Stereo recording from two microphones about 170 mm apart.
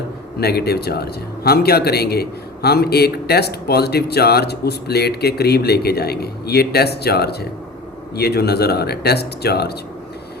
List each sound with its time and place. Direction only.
0.3 s speech: 70° left (ahead or behind)